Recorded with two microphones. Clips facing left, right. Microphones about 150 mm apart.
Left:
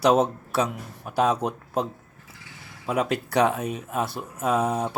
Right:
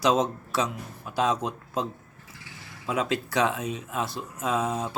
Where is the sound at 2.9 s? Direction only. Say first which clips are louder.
Left 2 dB; 60° left (ahead or behind).